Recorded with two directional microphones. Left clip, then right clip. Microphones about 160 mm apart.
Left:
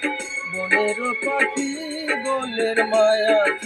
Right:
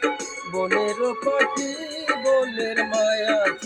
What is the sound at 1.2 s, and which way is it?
Music, 25° left (ahead or behind).